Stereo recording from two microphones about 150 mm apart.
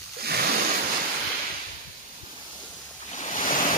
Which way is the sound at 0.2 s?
85° right.